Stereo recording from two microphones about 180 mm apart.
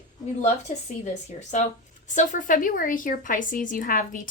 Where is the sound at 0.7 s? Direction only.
40° left (ahead or behind).